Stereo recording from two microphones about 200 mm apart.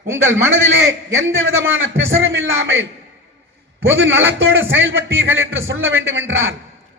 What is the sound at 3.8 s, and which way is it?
Speech, 70° right (ahead or behind).